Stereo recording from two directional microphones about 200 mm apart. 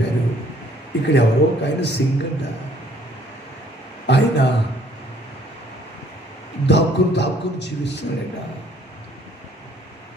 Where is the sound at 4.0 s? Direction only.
60° left (ahead or behind).